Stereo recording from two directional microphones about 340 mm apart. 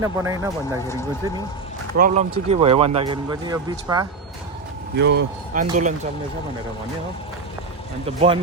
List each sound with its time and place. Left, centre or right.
0.0 s speech: centre
2.0 s speech: right
4.9 s speech: right
8.0 s speech: centre